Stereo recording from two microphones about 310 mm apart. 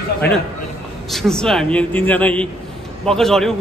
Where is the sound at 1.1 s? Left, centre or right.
Centre.